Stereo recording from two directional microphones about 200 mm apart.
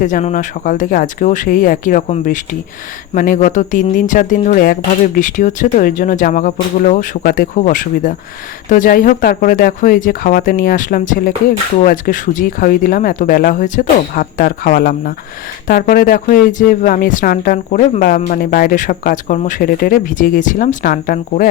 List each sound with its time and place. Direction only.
0.0 s speech: 40° left (ahead or behind)